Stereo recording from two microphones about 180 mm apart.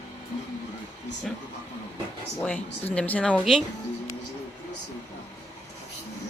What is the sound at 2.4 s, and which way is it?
Speech, 5° left (ahead or behind).